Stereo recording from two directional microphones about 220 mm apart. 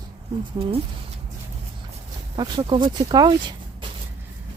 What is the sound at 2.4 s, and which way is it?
Speech, 20° right (ahead or behind).